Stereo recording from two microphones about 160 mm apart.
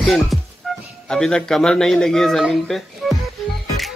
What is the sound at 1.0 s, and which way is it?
A man's voice, 5° left (ahead or behind).